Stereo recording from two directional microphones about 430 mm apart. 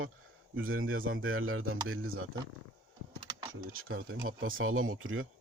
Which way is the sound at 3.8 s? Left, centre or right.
Right.